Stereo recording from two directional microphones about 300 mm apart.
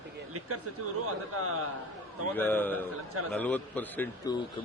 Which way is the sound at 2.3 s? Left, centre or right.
Centre.